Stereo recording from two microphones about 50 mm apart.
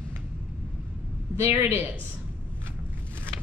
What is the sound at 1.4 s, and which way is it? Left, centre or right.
Speech, right.